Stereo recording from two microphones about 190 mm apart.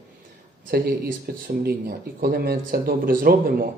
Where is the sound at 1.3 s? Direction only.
50° right (ahead or behind).